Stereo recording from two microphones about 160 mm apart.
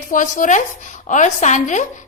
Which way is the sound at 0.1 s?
55° left (ahead or behind).